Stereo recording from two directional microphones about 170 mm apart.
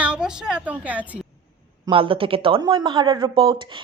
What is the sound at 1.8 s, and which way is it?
A woman's voice, 30° right (ahead or behind).